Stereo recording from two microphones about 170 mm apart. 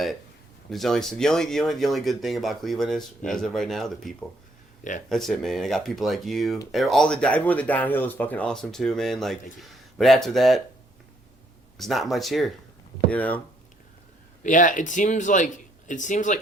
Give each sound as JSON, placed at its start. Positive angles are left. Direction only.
{"t": 0.7, "sound": "speech", "side_deg": 0}
{"t": 4.8, "sound": "speech", "side_deg": 50}
{"t": 5.0, "sound": "speech", "side_deg": 0}
{"t": 11.8, "sound": "speech", "side_deg": 0}
{"t": 14.4, "sound": "speech", "side_deg": 50}